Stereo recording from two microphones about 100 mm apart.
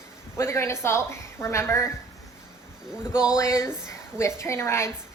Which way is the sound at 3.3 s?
30° left (ahead or behind).